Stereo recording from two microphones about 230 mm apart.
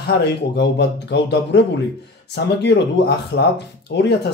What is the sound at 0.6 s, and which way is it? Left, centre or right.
Speech, left.